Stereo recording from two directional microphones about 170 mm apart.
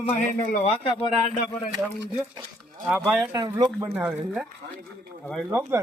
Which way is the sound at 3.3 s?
25° right (ahead or behind).